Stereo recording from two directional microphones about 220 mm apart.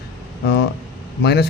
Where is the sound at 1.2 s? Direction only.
50° left (ahead or behind).